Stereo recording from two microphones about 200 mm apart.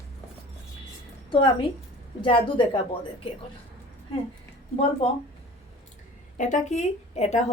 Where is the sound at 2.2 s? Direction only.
25° left (ahead or behind).